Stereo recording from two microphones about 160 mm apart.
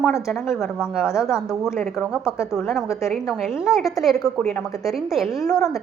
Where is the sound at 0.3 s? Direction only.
Centre (ahead or behind).